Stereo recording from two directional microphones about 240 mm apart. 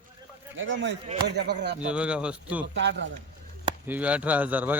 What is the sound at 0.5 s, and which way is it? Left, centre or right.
Speech, right.